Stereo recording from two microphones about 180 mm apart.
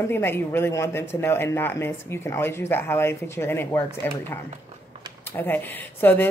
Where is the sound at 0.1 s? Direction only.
10° left (ahead or behind).